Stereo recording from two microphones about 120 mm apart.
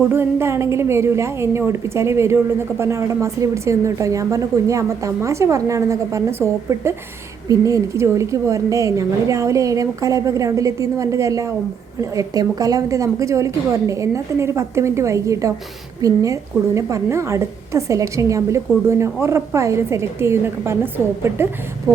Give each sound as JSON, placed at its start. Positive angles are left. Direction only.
{"t": 0.1, "sound": "a woman's voice", "side_deg": -20}
{"t": 21.9, "sound": "a woman's voice", "side_deg": -25}